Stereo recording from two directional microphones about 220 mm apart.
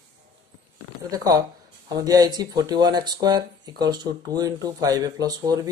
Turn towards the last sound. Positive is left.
turn(degrees=-15)  # may be behind; listen again after turning